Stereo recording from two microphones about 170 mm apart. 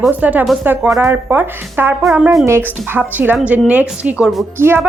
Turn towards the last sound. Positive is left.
turn(degrees=-15)  # may be behind; listen again after turning